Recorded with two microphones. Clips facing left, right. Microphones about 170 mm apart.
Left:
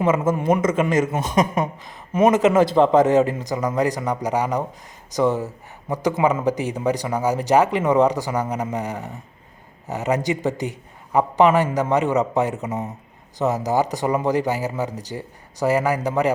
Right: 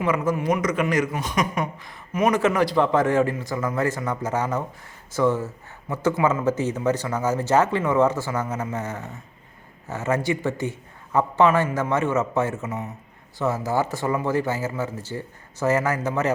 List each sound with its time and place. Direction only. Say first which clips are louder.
0.0 s a man's voice: left 3 dB; 25° left (ahead or behind)